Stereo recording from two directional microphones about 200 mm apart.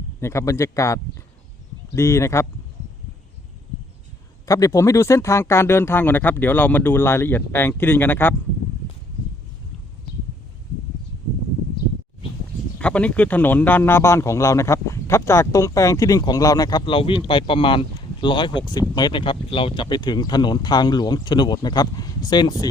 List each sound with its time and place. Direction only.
0.2 s speech: 15° left (ahead or behind)
2.0 s speech: 15° left (ahead or behind)
4.4 s speech: 15° left (ahead or behind)
12.8 s speech: 5° left (ahead or behind)